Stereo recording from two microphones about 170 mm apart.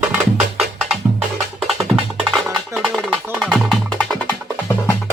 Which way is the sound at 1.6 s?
Centre (ahead or behind).